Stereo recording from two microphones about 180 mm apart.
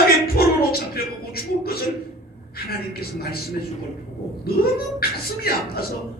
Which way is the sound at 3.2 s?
60° left (ahead or behind).